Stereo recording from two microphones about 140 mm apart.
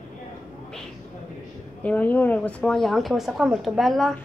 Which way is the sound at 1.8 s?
10° left (ahead or behind).